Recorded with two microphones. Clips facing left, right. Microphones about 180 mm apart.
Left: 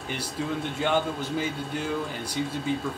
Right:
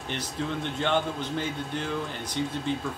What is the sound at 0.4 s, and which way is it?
Speech, 5° left (ahead or behind).